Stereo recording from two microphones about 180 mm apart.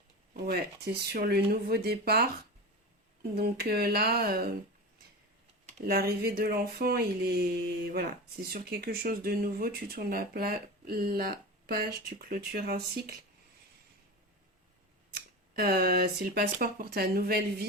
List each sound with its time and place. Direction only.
0.4 s speech: 65° right (ahead or behind)
3.3 s speech: 60° right (ahead or behind)
5.6 s speech: 55° right (ahead or behind)
8.4 s speech: 60° right (ahead or behind)
15.1 s speech: 60° right (ahead or behind)